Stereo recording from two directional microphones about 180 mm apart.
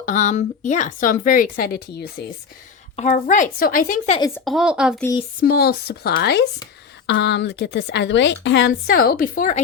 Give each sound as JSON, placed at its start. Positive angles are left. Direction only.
{"t": 0.0, "sound": "speech", "side_deg": 45}
{"t": 2.9, "sound": "speech", "side_deg": 40}
{"t": 4.4, "sound": "speech", "side_deg": 0}
{"t": 5.4, "sound": "speech", "side_deg": 60}
{"t": 7.1, "sound": "a woman's voice", "side_deg": 75}